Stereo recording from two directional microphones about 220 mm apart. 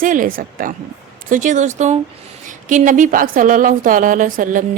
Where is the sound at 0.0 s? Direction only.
35° right (ahead or behind).